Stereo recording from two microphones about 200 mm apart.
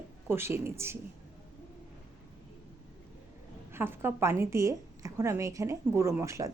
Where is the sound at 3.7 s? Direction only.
10° right (ahead or behind).